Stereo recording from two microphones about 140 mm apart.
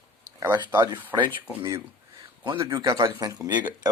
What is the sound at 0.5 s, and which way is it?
Speech, 30° right (ahead or behind).